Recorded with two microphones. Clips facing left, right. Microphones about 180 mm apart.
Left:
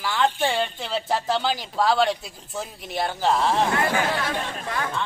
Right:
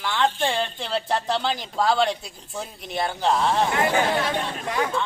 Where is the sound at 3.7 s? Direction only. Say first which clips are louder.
Right 2 dB; 20° right (ahead or behind).